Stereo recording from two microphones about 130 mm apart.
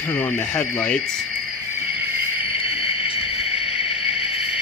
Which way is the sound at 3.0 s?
10° right (ahead or behind).